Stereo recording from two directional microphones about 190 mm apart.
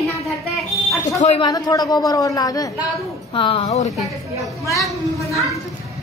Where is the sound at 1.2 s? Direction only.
35° left (ahead or behind).